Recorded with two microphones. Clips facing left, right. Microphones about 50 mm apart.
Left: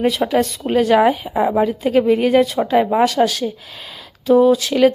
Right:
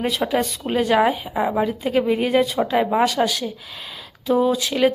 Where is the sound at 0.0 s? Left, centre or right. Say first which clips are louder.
Left 5 dB; centre.